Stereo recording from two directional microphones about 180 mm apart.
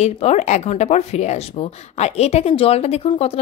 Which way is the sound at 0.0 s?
35° left (ahead or behind).